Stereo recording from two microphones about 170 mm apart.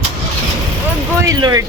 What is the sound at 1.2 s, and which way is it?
Speech, 20° right (ahead or behind).